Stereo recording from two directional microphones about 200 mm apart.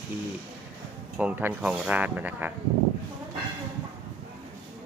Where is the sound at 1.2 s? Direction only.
10° right (ahead or behind).